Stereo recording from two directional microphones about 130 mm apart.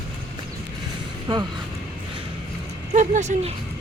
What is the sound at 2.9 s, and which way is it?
Speech, 65° right (ahead or behind).